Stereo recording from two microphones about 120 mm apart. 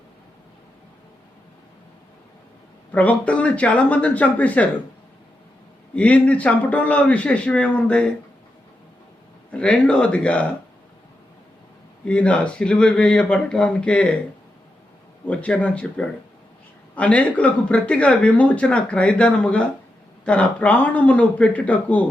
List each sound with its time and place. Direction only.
2.9 s speech: 10° left (ahead or behind)
5.9 s speech: 10° left (ahead or behind)
9.5 s speech: 10° left (ahead or behind)
12.0 s speech: 10° left (ahead or behind)
15.3 s speech: 10° left (ahead or behind)